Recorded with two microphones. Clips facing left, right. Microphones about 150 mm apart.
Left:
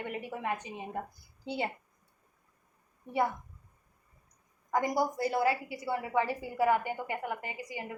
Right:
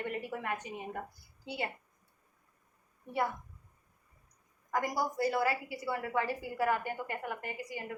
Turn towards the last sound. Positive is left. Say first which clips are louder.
# even
turn(degrees=15)  # may be behind; listen again after turning